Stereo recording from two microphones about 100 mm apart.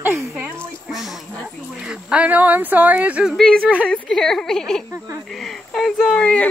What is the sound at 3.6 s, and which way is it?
Speech, 10° right (ahead or behind).